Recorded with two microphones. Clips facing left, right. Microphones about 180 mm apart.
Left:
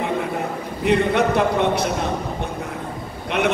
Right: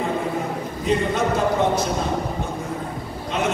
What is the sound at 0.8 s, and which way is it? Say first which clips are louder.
Speech: left 3 dB; 65° left (ahead or behind).